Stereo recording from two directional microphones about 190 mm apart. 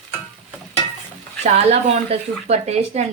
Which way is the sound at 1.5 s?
35° right (ahead or behind).